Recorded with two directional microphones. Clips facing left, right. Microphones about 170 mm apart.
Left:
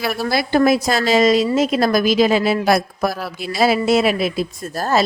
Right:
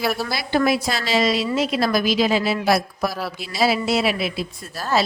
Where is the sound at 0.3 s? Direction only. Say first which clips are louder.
Left 8 dB; 50° left (ahead or behind).